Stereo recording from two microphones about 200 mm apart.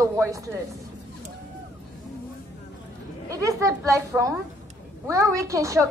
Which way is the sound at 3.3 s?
15° right (ahead or behind).